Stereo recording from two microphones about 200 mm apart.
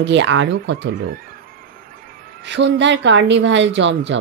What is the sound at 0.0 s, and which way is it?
Speech, 65° right (ahead or behind).